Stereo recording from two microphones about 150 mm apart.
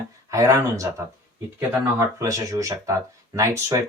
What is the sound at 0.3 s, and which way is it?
Speech, 20° right (ahead or behind).